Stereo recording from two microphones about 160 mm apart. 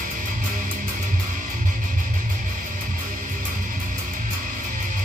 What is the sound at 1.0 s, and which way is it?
Music, 55° right (ahead or behind).